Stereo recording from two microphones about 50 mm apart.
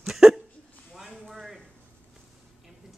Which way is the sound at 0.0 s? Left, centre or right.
Centre.